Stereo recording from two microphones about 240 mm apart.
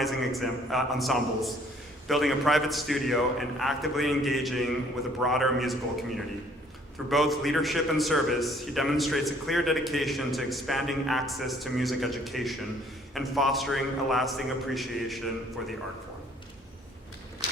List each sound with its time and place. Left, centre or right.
0.0 s a man's voice: centre
17.4 s walk: left